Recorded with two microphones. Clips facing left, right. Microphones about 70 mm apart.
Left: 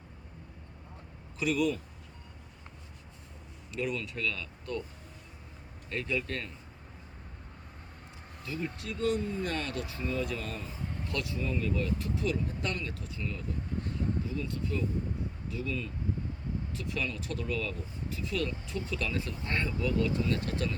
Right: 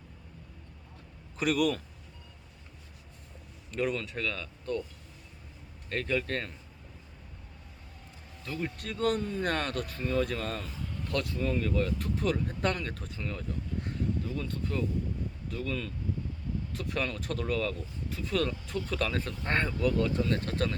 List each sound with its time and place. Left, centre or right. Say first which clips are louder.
1.4 s speech: right 2 dB; right
3.7 s speech: right 3 dB; right
5.9 s speech: right 3 dB; right
8.6 s speech: right 2 dB; right
10.6 s a sound: even; left
11.1 s speech: right 4 dB; right